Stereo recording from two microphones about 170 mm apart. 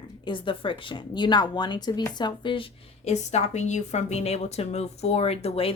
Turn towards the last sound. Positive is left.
turn(degrees=35)  # may be behind; listen again after turning